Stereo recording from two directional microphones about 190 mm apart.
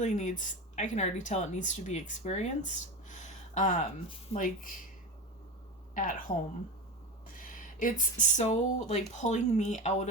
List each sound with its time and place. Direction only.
0.0 s speech: 40° left (ahead or behind)
5.9 s a woman's voice: 45° left (ahead or behind)
7.3 s speech: 45° left (ahead or behind)